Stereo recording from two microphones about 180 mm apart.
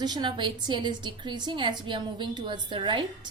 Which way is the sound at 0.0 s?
25° right (ahead or behind).